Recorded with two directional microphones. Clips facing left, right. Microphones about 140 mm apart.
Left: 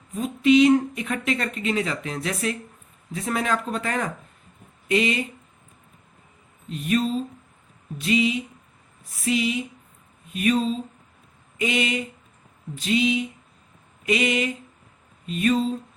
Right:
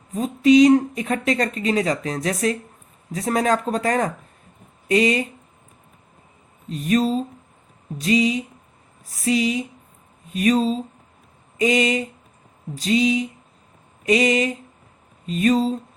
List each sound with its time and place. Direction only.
0.1 s speech: 35° right (ahead or behind)
6.7 s speech: 35° right (ahead or behind)